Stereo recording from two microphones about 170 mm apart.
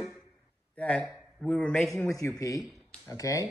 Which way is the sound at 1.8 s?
15° left (ahead or behind).